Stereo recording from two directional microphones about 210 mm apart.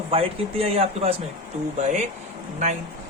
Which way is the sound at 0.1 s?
25° right (ahead or behind).